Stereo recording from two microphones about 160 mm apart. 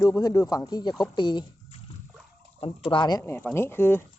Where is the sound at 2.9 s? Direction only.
25° left (ahead or behind).